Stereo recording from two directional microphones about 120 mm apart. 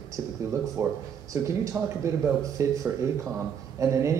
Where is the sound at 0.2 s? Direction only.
25° right (ahead or behind).